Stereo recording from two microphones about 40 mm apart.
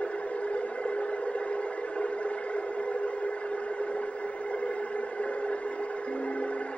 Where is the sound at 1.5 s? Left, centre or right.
Left.